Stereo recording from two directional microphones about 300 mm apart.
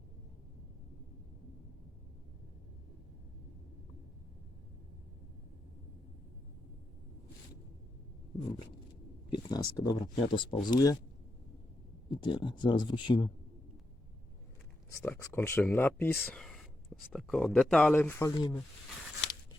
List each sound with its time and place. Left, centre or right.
9.3 s speech: centre
12.1 s speech: centre
14.8 s speech: centre